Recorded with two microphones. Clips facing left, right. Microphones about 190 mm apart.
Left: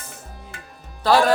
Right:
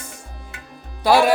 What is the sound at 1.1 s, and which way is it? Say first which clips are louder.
Music: right 2 dB; 10° right (ahead or behind).